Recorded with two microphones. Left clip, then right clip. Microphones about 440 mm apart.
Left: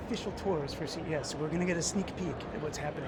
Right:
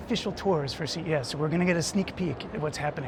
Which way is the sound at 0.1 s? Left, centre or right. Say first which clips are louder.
Right 7 dB; right.